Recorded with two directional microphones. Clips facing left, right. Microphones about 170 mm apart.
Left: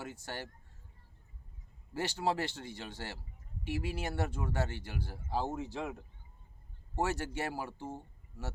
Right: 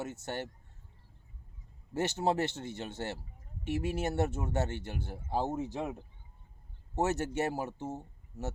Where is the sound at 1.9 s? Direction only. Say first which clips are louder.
Right 3 dB; 20° right (ahead or behind).